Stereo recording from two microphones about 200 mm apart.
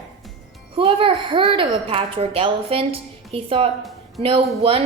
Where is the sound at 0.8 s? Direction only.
25° right (ahead or behind).